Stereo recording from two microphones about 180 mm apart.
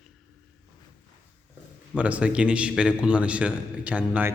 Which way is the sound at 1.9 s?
5° right (ahead or behind).